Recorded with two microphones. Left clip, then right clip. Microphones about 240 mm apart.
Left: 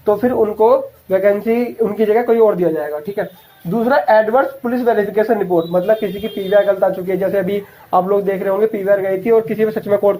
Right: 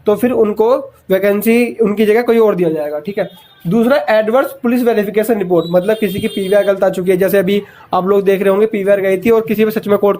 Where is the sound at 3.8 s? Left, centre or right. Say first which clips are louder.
Right 2 dB; right.